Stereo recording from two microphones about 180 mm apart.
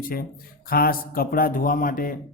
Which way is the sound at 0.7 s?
55° left (ahead or behind).